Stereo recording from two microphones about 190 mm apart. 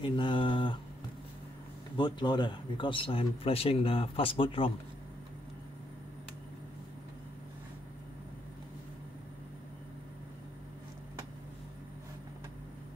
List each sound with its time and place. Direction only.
0.0 s mantra: 25° left (ahead or behind)
2.0 s speech: 25° left (ahead or behind)